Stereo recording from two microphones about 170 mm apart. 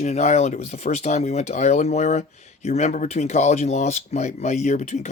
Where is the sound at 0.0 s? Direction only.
40° left (ahead or behind).